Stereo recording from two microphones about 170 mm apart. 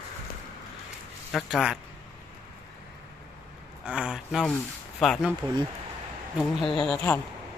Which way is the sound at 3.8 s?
5° right (ahead or behind).